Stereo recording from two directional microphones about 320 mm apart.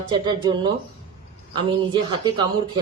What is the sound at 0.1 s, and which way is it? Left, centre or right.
Speech, centre.